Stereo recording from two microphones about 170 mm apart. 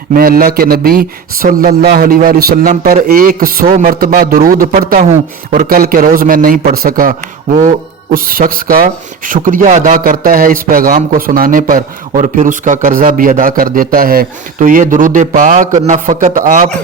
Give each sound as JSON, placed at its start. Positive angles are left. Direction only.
{"t": 0.1, "sound": "a man's voice", "side_deg": -60}
{"t": 8.1, "sound": "a man's voice", "side_deg": -55}